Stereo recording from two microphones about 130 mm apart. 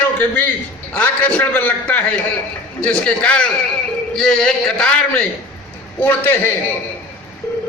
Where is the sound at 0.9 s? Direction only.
10° left (ahead or behind).